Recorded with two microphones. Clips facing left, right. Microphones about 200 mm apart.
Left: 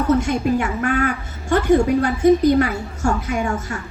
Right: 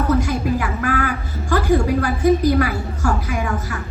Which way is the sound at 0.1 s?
25° left (ahead or behind).